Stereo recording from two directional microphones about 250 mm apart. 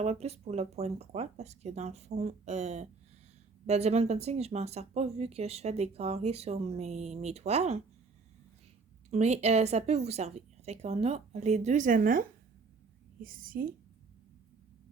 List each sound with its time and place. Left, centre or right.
0.0 s speech: right
9.0 s speech: right
13.2 s a woman's voice: right